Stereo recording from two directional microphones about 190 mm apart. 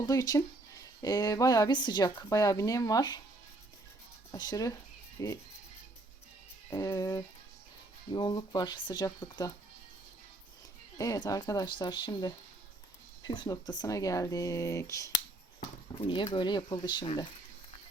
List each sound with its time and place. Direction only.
0.0 s speech: 20° left (ahead or behind)
4.3 s speech: 20° left (ahead or behind)
6.7 s speech: 15° left (ahead or behind)
10.9 s speech: 20° left (ahead or behind)